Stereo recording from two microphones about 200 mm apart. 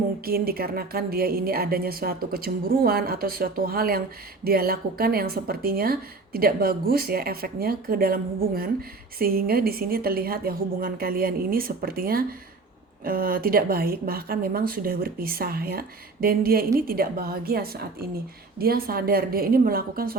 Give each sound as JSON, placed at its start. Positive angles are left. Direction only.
{"t": 0.3, "sound": "speech", "side_deg": -50}